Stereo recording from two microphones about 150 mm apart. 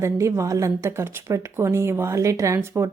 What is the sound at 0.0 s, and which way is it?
A woman's voice, 20° right (ahead or behind).